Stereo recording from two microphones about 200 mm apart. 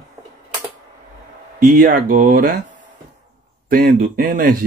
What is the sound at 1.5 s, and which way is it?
Speech, 45° right (ahead or behind).